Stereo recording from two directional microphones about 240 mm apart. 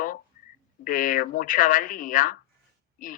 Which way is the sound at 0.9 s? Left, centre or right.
Left.